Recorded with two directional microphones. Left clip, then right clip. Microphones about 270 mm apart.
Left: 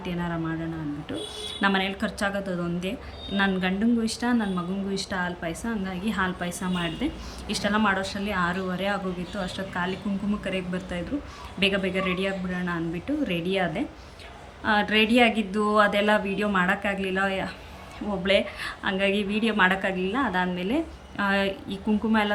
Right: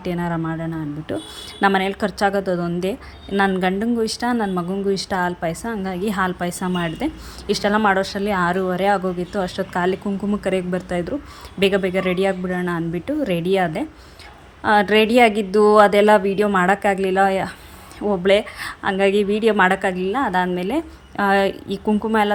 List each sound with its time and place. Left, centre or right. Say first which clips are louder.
0.0 s a woman's voice: right 6 dB; centre